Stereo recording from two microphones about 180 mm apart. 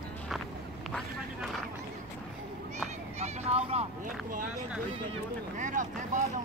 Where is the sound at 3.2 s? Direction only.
35° right (ahead or behind).